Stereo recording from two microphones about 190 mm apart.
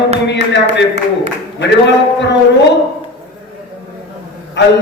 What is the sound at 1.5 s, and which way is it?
Speech, 65° left (ahead or behind).